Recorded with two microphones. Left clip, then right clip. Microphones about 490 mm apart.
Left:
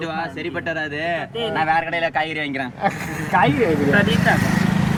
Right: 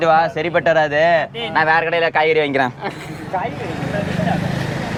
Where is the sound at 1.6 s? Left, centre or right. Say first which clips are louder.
Right 5 dB; centre.